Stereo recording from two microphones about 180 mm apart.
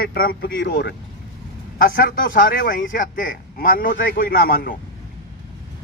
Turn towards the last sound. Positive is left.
turn(degrees=55)  # may be behind; listen again after turning